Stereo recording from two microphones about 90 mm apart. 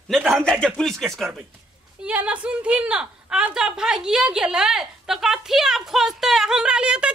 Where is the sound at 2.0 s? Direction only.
15° right (ahead or behind).